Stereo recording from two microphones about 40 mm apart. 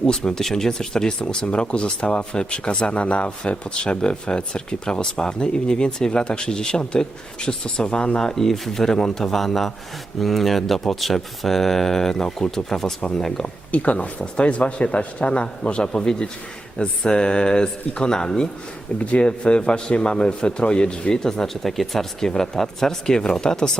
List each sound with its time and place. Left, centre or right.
0.2 s speech: centre
8.2 s a man's voice: centre
13.4 s speech: left; by 18.4 s centre
18.9 s speech: left